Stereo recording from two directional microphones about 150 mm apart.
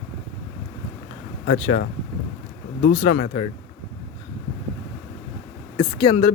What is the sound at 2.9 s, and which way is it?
Speech, 50° left (ahead or behind).